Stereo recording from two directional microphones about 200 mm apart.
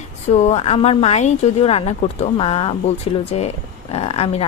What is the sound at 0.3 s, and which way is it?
A woman's voice, 30° left (ahead or behind).